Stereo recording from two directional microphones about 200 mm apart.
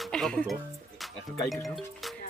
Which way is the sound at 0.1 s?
5° left (ahead or behind).